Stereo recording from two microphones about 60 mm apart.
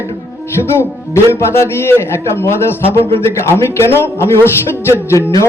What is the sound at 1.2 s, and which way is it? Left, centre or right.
A man's voice, left.